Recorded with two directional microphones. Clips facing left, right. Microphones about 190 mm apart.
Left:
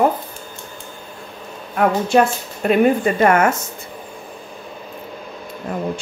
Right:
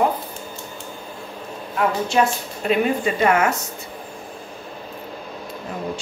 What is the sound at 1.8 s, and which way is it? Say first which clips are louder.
Speech: left 4 dB; 55° left (ahead or behind).